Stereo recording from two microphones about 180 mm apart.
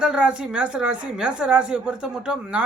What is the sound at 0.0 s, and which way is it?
A woman's voice, 5° right (ahead or behind).